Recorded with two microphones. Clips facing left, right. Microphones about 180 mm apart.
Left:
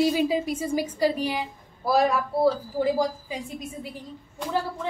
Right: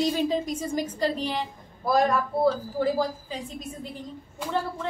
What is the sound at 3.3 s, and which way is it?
A woman's voice, 10° left (ahead or behind).